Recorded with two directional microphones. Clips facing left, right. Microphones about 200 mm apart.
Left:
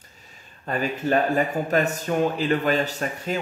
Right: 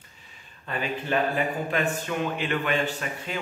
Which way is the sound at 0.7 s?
45° left (ahead or behind).